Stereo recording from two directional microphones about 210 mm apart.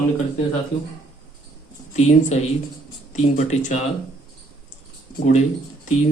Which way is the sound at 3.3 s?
35° left (ahead or behind).